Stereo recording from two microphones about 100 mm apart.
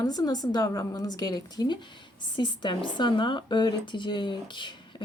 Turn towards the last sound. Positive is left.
turn(degrees=50)  # may be behind; listen again after turning